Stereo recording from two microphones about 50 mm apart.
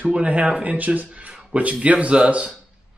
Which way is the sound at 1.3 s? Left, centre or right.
Centre.